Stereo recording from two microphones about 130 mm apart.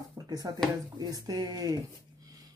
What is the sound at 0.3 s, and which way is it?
Speech, 30° right (ahead or behind).